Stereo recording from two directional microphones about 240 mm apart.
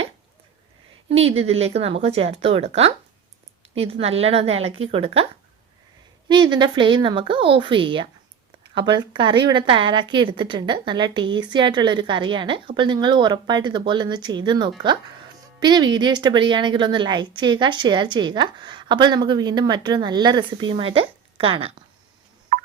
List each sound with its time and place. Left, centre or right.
1.1 s a woman's voice: right